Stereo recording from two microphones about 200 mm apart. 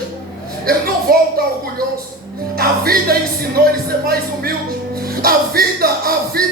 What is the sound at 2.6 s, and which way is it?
Music, 50° right (ahead or behind).